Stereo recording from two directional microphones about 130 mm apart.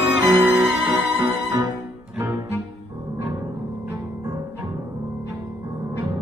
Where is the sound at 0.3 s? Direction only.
15° right (ahead or behind).